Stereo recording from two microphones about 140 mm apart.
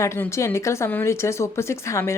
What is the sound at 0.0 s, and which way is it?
A woman's voice, 20° left (ahead or behind).